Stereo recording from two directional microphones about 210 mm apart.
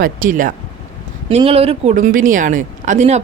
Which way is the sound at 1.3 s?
25° right (ahead or behind).